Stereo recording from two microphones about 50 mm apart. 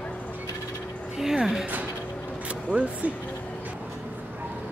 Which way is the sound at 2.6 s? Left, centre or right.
Right.